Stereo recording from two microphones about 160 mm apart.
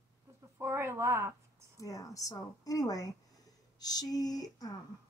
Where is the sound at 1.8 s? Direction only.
20° left (ahead or behind).